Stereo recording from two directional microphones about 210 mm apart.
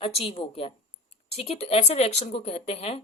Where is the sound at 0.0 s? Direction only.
25° left (ahead or behind).